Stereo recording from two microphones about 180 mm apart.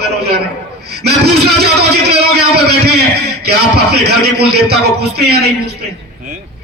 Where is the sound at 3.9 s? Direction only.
65° right (ahead or behind).